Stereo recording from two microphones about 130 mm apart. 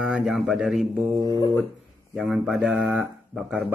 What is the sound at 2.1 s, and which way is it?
A man's voice, centre (ahead or behind).